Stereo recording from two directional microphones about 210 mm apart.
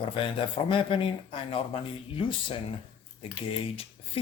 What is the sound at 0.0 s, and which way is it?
Speech, 25° left (ahead or behind).